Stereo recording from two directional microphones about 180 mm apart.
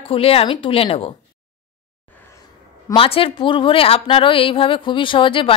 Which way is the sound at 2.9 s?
30° left (ahead or behind).